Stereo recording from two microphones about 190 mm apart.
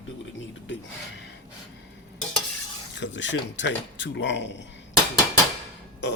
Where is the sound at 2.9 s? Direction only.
70° left (ahead or behind).